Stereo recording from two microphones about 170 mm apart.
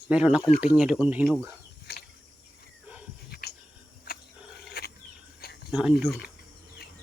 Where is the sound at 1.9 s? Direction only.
70° left (ahead or behind).